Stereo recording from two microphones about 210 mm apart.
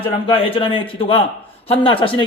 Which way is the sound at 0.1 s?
25° left (ahead or behind).